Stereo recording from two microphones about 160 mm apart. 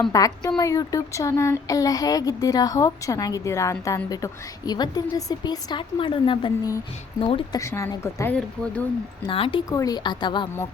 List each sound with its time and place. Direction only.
0.1 s a child's voice: 20° left (ahead or behind)
7.6 s a woman's voice: 20° left (ahead or behind)
9.2 s speech: 35° left (ahead or behind)
9.6 s a child's voice: 20° left (ahead or behind)